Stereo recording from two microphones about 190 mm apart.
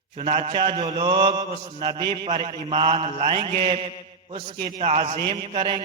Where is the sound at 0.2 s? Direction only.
30° right (ahead or behind).